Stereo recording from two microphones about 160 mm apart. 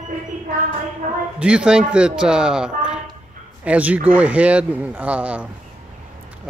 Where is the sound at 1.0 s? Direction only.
55° right (ahead or behind).